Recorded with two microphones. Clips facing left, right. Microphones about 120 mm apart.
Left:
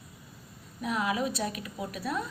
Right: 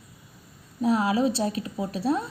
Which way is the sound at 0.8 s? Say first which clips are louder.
Right 7 dB; 30° right (ahead or behind).